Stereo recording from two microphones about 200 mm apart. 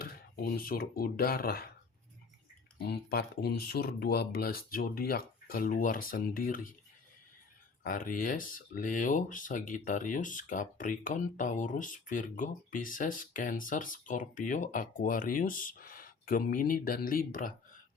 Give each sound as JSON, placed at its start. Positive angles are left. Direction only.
{"t": 0.0, "sound": "speech", "side_deg": 50}
{"t": 2.8, "sound": "speech", "side_deg": 55}
{"t": 7.9, "sound": "speech", "side_deg": 45}